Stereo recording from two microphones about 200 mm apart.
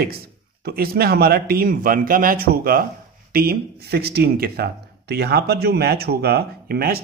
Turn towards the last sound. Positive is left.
turn(degrees=-50)  # may be behind; listen again after turning